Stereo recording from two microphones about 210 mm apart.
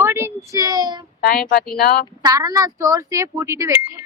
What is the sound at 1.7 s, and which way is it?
Speech, 45° left (ahead or behind).